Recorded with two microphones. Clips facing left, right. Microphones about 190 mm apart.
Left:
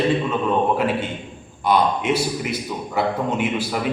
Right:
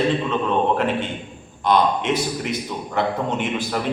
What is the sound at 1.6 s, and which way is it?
A man's voice, 5° left (ahead or behind).